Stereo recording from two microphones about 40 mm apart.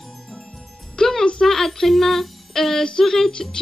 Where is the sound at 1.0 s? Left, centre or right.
Left.